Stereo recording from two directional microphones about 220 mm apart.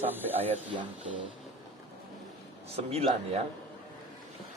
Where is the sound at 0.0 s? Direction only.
10° right (ahead or behind).